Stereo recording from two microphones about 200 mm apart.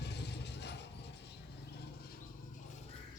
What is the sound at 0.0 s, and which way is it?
Mechanisms, 55° left (ahead or behind).